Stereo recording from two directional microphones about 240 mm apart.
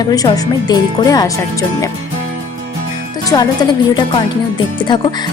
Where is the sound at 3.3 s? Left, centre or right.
Centre.